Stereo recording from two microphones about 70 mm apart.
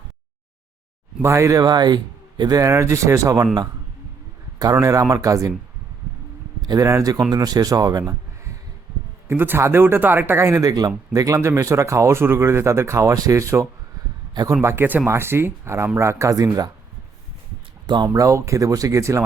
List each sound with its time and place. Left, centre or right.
1.2 s speech: right
1.6 s speech: right
2.6 s speech: right
4.6 s speech: right
6.7 s speech: right
7.3 s speech: right
9.2 s speech: right
10.4 s speech: right
10.7 s speech: right
11.3 s speech: right
14.6 s speech: right
17.8 s speech: right
18.1 s speech: right